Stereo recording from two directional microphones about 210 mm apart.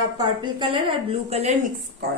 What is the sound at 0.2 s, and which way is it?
A woman's voice, 20° right (ahead or behind).